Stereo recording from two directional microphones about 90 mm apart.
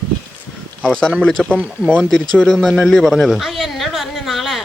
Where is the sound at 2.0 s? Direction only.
5° left (ahead or behind).